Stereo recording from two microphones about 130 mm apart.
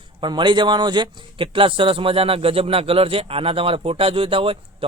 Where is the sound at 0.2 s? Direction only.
35° right (ahead or behind).